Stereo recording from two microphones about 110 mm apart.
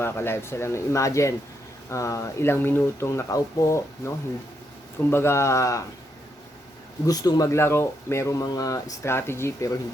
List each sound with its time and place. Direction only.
0.0 s speech: 20° left (ahead or behind)
5.1 s speech: 25° left (ahead or behind)
7.0 s speech: 35° left (ahead or behind)